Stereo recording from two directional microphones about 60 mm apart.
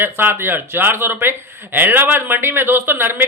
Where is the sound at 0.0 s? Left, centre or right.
Right.